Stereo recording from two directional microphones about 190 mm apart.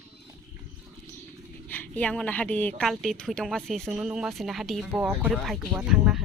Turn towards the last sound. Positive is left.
turn(degrees=-5)  # may be behind; listen again after turning